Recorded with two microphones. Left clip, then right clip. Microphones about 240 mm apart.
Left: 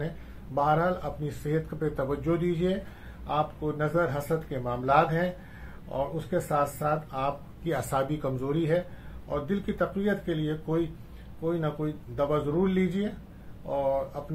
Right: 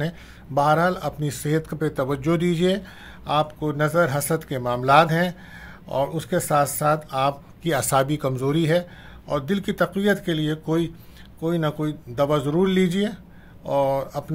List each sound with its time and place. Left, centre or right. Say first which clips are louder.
0.6 s speech: right 6 dB; right